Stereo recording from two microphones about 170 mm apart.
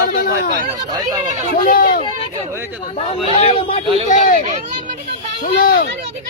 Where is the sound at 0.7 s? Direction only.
25° right (ahead or behind).